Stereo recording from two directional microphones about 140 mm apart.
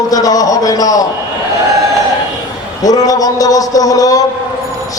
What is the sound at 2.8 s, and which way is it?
A man's voice, 25° left (ahead or behind).